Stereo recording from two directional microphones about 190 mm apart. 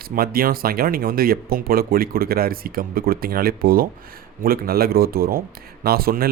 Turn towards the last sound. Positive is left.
turn(degrees=-50)  # may be behind; listen again after turning